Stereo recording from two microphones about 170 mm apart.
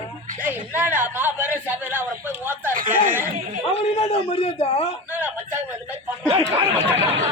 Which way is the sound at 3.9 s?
35° left (ahead or behind).